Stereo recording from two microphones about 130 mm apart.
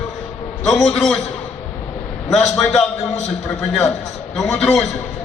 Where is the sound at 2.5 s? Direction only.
5° left (ahead or behind).